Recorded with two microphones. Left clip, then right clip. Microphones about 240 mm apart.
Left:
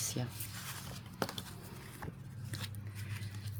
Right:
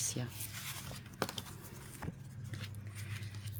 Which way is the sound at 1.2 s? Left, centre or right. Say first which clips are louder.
Even; centre.